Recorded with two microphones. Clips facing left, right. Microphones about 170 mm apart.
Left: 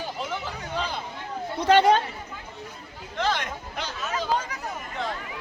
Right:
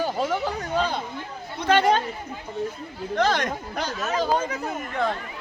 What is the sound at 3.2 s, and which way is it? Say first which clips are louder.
Speech: right 4 dB; 40° right (ahead or behind).